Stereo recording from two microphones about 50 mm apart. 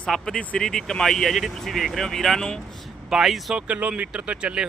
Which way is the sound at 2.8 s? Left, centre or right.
Centre.